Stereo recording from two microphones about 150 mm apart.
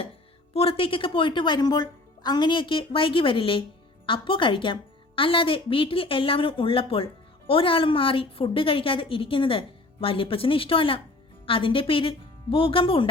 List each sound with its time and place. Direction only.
0.5 s a woman's voice: 40° left (ahead or behind)